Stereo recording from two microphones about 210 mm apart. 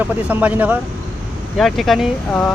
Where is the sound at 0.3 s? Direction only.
10° right (ahead or behind).